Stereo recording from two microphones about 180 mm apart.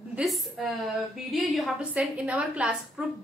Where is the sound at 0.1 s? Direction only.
Centre (ahead or behind).